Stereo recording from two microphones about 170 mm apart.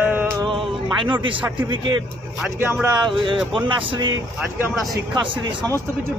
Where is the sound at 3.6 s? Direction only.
30° right (ahead or behind).